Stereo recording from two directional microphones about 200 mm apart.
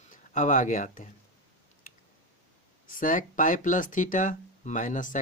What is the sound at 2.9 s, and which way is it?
Speech, 40° left (ahead or behind).